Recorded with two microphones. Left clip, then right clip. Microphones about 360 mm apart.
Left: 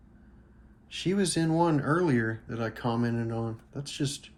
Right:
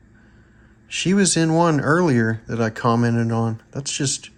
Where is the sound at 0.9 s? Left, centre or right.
Right.